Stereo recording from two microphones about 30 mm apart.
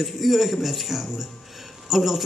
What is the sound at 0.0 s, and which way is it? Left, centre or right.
Speech, centre.